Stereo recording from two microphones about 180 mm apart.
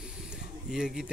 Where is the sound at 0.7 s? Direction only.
5° right (ahead or behind).